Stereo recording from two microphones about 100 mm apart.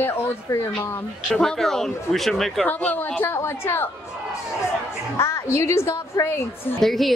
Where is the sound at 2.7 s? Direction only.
15° left (ahead or behind).